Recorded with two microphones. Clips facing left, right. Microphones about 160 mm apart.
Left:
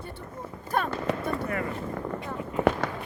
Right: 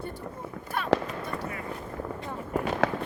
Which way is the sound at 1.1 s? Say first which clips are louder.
Left 6 dB; 65° left (ahead or behind).